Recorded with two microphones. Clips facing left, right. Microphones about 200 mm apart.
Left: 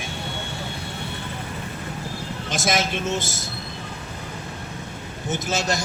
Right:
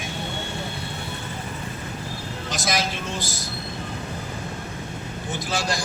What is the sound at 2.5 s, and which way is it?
Speech, 25° left (ahead or behind).